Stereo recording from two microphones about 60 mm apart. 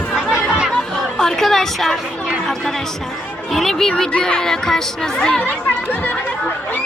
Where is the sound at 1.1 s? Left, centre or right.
Centre.